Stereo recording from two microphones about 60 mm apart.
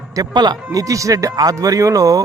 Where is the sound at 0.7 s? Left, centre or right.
Right.